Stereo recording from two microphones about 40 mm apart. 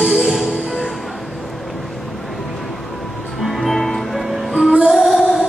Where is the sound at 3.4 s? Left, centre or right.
Centre.